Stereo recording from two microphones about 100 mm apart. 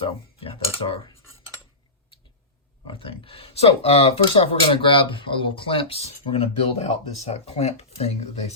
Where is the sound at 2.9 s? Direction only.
65° left (ahead or behind).